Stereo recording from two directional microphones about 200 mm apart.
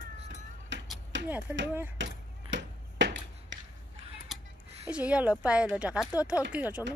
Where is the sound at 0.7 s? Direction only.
65° right (ahead or behind).